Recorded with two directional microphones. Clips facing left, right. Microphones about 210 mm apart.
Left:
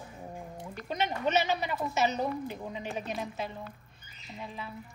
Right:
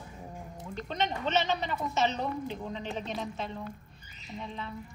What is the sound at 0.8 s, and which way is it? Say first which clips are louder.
A woman's voice: left 2 dB; 10° left (ahead or behind).